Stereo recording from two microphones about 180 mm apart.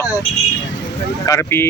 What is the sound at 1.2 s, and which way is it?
Speech, 15° left (ahead or behind).